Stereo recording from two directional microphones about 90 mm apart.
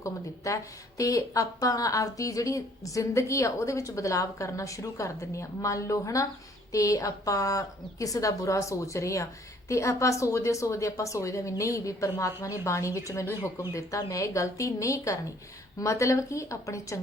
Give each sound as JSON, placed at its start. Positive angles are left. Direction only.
{"t": 0.0, "sound": "speech", "side_deg": 35}